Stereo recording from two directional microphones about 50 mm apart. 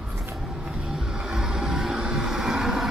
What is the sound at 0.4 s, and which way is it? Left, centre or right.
Vehicle, centre.